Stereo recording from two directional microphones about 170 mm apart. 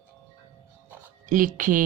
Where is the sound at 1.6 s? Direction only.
50° right (ahead or behind).